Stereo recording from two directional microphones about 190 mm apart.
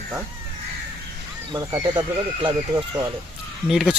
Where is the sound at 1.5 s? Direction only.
20° right (ahead or behind).